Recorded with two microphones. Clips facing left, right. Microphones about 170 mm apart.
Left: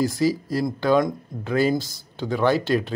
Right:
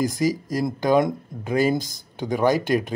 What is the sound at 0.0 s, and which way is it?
Speech, 15° right (ahead or behind).